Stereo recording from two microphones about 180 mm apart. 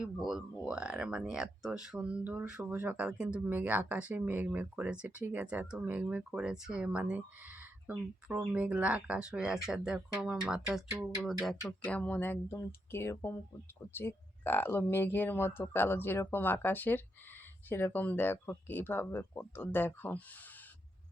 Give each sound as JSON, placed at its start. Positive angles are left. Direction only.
{"t": 0.0, "sound": "speech", "side_deg": 0}